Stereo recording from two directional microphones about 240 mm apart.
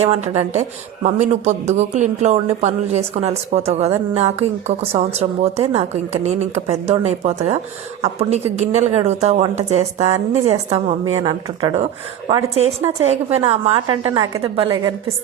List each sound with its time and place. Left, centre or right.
0.0 s a man's voice: right